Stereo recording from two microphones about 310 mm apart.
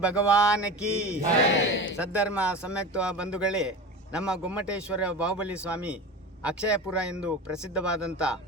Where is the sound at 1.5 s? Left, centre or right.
Left.